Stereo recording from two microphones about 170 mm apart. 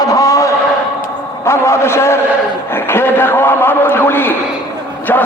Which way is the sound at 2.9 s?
15° left (ahead or behind).